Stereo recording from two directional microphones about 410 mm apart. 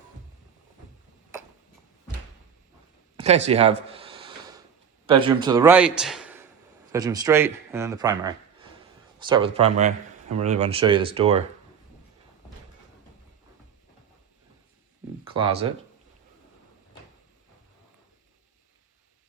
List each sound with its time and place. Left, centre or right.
3.2 s a sound: centre
5.0 s a man's voice: centre
15.3 s speech: centre